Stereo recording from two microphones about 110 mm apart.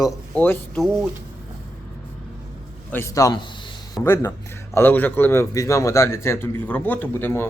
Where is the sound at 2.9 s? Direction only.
25° left (ahead or behind).